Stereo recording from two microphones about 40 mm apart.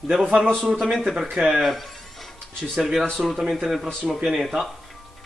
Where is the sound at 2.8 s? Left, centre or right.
Centre.